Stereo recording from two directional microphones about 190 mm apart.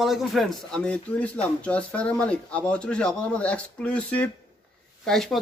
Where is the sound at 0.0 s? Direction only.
Centre (ahead or behind).